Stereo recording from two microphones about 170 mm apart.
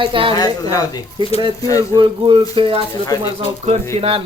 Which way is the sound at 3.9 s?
35° right (ahead or behind).